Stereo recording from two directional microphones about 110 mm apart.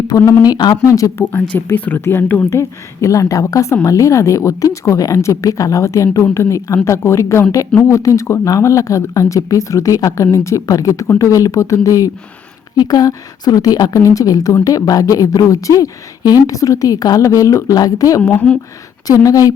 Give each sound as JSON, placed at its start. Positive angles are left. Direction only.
{"t": 0.1, "sound": "a woman's voice", "side_deg": 30}
{"t": 1.2, "sound": "a woman's voice", "side_deg": 15}
{"t": 19.2, "sound": "a woman's voice", "side_deg": 35}